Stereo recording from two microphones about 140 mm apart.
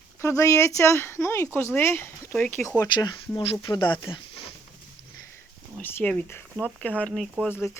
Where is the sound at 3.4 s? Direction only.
45° left (ahead or behind).